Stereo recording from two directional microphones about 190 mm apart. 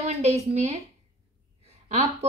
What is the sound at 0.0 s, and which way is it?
Speech, 35° right (ahead or behind).